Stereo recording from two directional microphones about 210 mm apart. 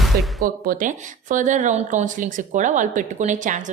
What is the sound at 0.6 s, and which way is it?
Speech, 40° right (ahead or behind).